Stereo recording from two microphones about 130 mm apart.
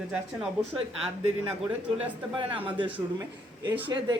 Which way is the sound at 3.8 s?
35° right (ahead or behind).